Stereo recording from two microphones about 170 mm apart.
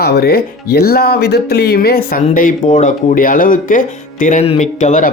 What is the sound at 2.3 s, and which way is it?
Speech, 50° left (ahead or behind).